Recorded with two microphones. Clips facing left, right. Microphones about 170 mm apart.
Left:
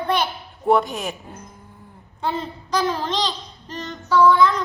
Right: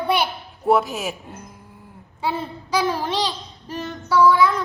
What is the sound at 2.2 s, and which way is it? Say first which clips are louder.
Child singing: even; 10° right (ahead or behind).